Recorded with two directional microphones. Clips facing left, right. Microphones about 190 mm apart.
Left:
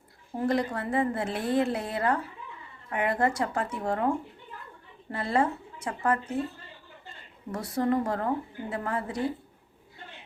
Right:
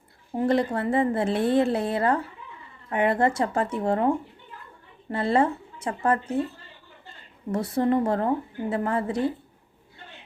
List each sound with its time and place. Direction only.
0.3 s a woman's voice: 25° right (ahead or behind)
5.1 s a woman's voice: 25° right (ahead or behind)
7.5 s a woman's voice: 25° right (ahead or behind)